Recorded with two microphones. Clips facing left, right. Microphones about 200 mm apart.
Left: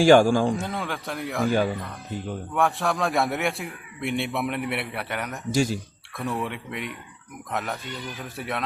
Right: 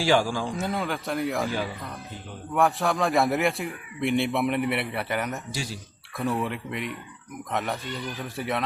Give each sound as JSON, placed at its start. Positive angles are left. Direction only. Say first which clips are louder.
{"t": 0.0, "sound": "speech", "louder": "left 7 dB", "side_deg": 50}
{"t": 0.6, "sound": "a man's voice", "louder": "right 2 dB", "side_deg": 0}
{"t": 1.5, "sound": "speech", "louder": "left 7 dB", "side_deg": 50}
{"t": 2.6, "sound": "a man's voice", "louder": "right 1 dB", "side_deg": 0}
{"t": 5.5, "sound": "speech", "louder": "left 11 dB", "side_deg": 45}
{"t": 6.1, "sound": "a man's voice", "louder": "right 2 dB", "side_deg": 0}